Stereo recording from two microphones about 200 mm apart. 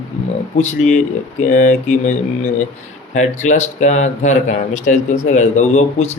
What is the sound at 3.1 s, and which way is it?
Speech, 35° left (ahead or behind).